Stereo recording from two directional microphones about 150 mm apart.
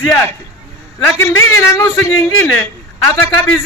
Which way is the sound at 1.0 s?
15° left (ahead or behind).